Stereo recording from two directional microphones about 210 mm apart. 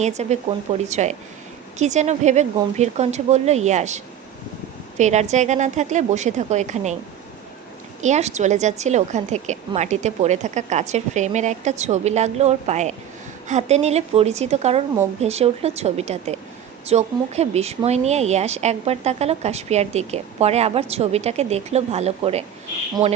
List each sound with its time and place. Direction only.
0.0 s speech: 30° right (ahead or behind)
8.0 s speech: 35° right (ahead or behind)